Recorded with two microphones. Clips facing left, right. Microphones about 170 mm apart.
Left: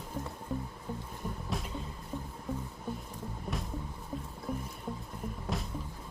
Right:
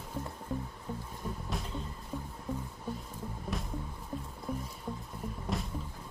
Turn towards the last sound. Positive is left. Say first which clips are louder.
# right 1 dB
turn(degrees=0)  # may be behind; listen again after turning